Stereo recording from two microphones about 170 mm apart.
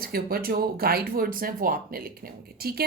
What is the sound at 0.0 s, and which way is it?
Speech, 60° right (ahead or behind).